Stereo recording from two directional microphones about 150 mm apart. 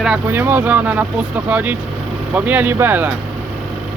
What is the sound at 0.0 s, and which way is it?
Speech, 10° right (ahead or behind).